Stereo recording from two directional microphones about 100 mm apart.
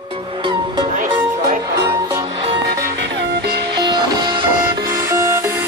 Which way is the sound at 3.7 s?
45° right (ahead or behind).